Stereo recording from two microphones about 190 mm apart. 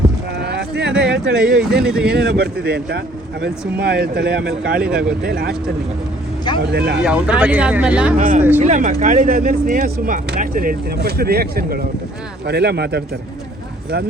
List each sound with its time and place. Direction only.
0.3 s a sound: 60° right (ahead or behind)
0.9 s a sound: 5° right (ahead or behind)
1.3 s speech: 5° right (ahead or behind)
2.1 s speech: 55° right (ahead or behind)
4.8 s speech: 5° right (ahead or behind)
5.2 s speech: 50° right (ahead or behind)
6.6 s speech: 60° right (ahead or behind)
7.0 s speech: 5° right (ahead or behind)
8.2 s speech: 45° right (ahead or behind); by 13.0 s 60° right (ahead or behind)